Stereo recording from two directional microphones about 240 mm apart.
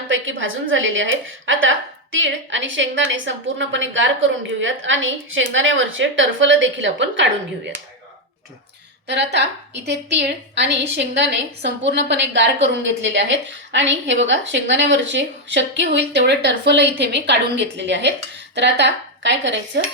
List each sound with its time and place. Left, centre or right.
0.1 s a woman's voice: right
9.3 s a woman's voice: right